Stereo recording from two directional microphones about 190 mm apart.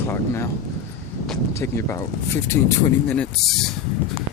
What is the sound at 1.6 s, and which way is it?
Speech, 15° left (ahead or behind).